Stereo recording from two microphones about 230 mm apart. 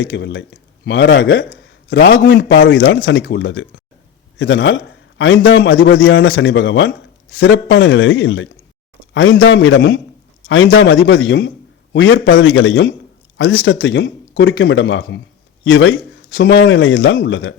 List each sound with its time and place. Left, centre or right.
0.0 s a man's voice: left